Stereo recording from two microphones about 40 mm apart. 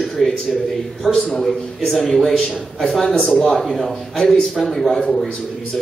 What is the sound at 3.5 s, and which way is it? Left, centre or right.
A man's voice, centre.